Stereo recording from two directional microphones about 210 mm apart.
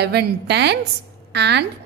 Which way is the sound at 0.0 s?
50° right (ahead or behind).